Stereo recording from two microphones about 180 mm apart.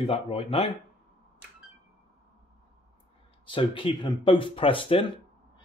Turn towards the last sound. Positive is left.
turn(degrees=30)  # may be behind; listen again after turning